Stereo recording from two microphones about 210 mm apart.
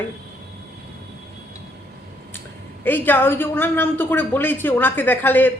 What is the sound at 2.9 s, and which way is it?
A woman's voice, 10° left (ahead or behind).